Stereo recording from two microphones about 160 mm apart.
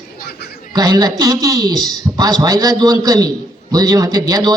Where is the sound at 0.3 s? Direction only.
90° left.